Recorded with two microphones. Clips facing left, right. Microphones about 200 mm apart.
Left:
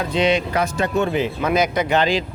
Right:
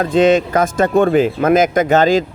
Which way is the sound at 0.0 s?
50° right (ahead or behind).